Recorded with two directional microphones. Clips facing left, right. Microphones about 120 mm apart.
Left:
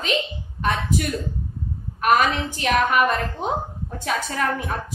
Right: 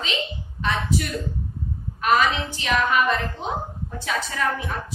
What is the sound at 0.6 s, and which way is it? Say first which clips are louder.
A woman's voice: left 2 dB; 50° left (ahead or behind).